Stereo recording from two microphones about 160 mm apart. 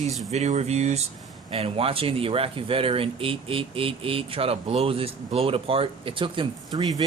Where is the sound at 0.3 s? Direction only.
45° right (ahead or behind).